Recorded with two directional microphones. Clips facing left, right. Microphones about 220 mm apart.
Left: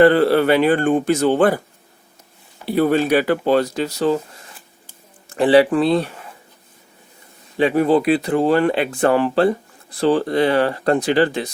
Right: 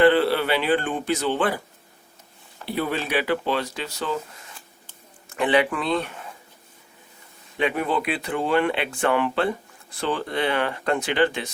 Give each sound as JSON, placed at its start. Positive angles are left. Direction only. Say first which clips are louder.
{"t": 0.0, "sound": "speech", "louder": "left 5 dB", "side_deg": 45}
{"t": 2.6, "sound": "speech", "louder": "left 10 dB", "side_deg": 45}
{"t": 5.3, "sound": "speech", "louder": "left 8 dB", "side_deg": 35}
{"t": 7.5, "sound": "speech", "louder": "left 9 dB", "side_deg": 35}